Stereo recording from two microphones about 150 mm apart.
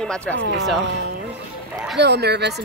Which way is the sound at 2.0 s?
90° right.